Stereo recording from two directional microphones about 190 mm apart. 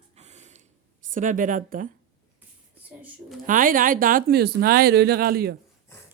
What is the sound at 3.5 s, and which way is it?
Speech, 45° right (ahead or behind).